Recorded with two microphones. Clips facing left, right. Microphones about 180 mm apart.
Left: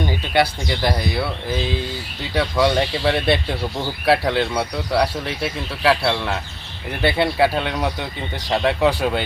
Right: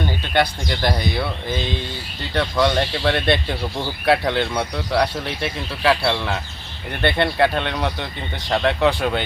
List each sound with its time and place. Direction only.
0.0 s speech: 5° left (ahead or behind)